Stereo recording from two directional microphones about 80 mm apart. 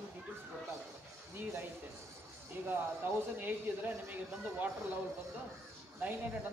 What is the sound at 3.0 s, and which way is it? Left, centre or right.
Speech, right.